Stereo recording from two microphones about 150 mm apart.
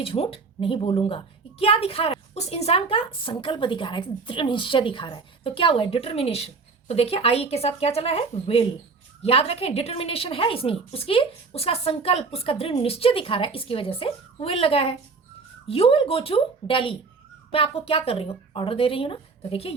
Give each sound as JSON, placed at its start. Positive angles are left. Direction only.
{"t": 0.0, "sound": "a woman's voice", "side_deg": 40}